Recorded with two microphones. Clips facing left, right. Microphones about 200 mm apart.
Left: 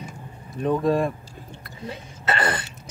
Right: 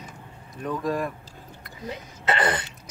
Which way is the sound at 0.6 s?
25° left (ahead or behind).